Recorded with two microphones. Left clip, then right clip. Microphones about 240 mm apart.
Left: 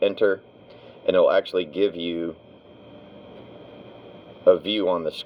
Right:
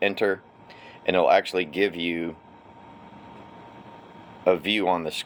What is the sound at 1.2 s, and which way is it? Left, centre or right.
Speech, right.